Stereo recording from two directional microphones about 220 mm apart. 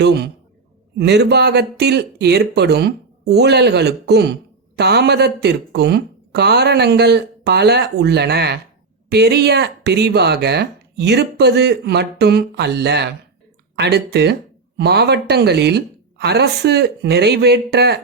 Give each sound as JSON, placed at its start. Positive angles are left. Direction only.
{"t": 0.0, "sound": "speech", "side_deg": -50}